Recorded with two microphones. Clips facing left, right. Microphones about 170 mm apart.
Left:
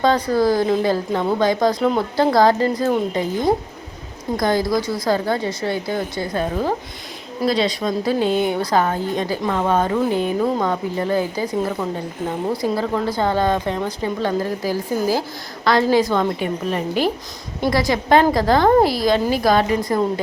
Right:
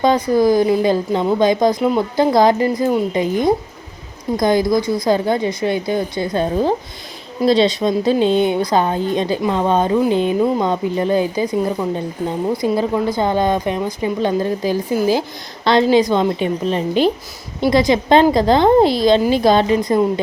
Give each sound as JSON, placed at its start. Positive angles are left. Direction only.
{"t": 0.0, "sound": "speech", "side_deg": -15}